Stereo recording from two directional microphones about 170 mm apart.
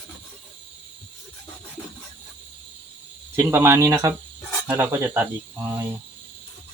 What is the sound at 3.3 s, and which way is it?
Speech, 15° right (ahead or behind).